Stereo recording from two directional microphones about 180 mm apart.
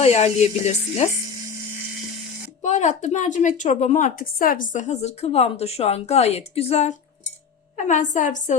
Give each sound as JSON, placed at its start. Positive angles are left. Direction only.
{"t": 0.0, "sound": "speech", "side_deg": 35}
{"t": 2.6, "sound": "a woman's voice", "side_deg": 40}